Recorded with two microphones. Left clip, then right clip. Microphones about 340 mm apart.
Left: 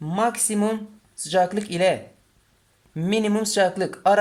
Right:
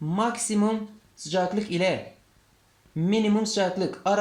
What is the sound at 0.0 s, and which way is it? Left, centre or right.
Speech, left.